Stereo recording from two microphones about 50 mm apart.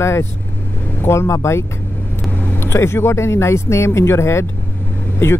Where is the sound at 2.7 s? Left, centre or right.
Left.